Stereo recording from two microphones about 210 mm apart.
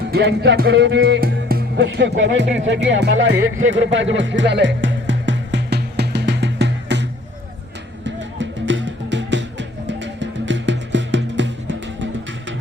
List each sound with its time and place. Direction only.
0.1 s music: 55° right (ahead or behind)